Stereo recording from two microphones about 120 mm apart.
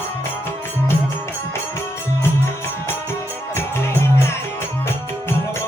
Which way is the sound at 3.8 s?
20° left (ahead or behind).